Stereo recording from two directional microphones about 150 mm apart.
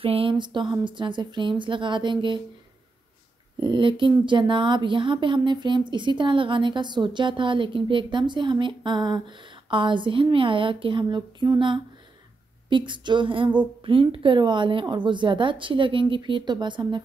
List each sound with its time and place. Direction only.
0.0 s speech: 40° right (ahead or behind)
3.6 s speech: 30° right (ahead or behind)